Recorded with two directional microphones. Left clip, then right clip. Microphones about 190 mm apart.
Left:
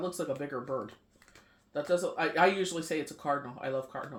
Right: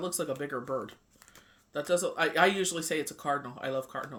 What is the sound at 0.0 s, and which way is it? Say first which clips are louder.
Speech: right 1 dB; 25° right (ahead or behind).